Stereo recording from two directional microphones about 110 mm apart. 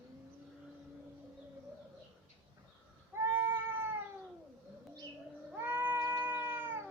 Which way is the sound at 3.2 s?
20° right (ahead or behind).